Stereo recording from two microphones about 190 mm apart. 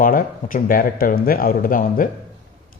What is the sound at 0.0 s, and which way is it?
Speech, 45° left (ahead or behind).